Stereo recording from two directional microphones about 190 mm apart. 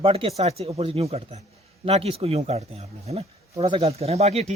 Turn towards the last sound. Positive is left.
turn(degrees=-35)  # may be behind; listen again after turning